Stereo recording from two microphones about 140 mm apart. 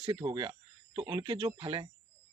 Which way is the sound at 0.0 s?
35° right (ahead or behind).